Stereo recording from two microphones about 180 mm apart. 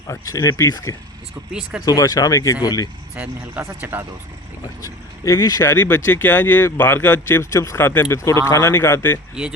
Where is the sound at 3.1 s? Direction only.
10° right (ahead or behind).